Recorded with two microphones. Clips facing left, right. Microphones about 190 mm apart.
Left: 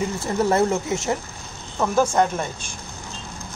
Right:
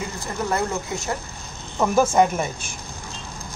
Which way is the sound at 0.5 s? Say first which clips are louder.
Left 4 dB; 25° left (ahead or behind).